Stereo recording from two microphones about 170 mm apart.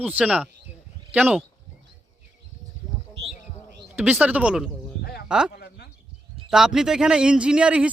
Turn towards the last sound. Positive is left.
turn(degrees=-5)  # may be behind; listen again after turning